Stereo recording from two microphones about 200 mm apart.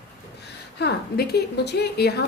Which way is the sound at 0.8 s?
55° left (ahead or behind).